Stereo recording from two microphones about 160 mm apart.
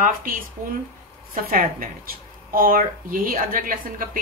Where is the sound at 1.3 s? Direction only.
65° right (ahead or behind).